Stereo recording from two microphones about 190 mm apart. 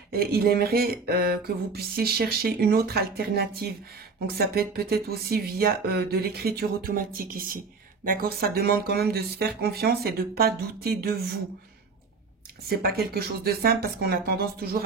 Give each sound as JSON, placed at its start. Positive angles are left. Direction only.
{"t": 0.1, "sound": "speech", "side_deg": -55}
{"t": 12.6, "sound": "speech", "side_deg": -55}